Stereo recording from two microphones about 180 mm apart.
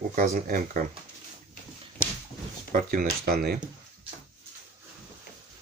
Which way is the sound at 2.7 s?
50° right (ahead or behind).